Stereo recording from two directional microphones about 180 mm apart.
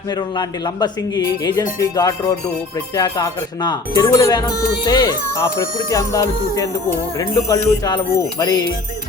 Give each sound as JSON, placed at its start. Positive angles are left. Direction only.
{"t": 0.1, "sound": "speech", "side_deg": 20}
{"t": 7.2, "sound": "speech", "side_deg": 20}